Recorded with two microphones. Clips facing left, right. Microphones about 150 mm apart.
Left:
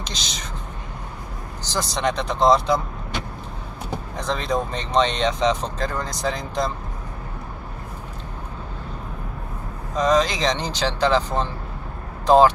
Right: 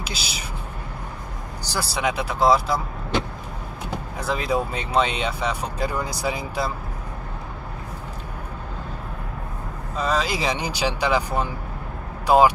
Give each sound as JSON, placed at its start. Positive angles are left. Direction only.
{"t": 0.0, "sound": "speech", "side_deg": -5}
{"t": 1.6, "sound": "speech", "side_deg": -10}
{"t": 4.2, "sound": "speech", "side_deg": -5}
{"t": 9.9, "sound": "speech", "side_deg": -5}